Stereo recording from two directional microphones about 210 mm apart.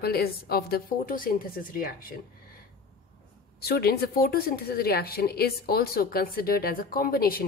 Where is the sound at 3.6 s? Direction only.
50° left (ahead or behind).